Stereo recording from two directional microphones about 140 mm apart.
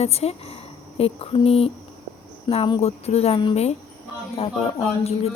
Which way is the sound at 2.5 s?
40° left (ahead or behind).